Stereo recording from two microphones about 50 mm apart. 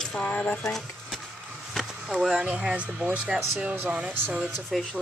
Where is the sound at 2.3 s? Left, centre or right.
Right.